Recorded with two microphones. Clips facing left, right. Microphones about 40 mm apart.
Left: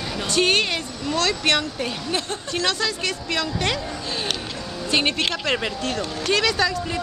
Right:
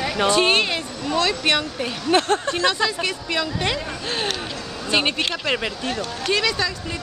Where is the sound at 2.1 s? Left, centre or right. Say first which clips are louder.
Right 12 dB; right.